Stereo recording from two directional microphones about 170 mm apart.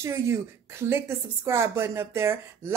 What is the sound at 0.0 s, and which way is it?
A woman's voice, 15° right (ahead or behind).